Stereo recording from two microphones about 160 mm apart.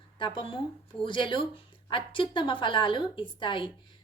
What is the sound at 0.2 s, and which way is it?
A woman's voice, 30° left (ahead or behind).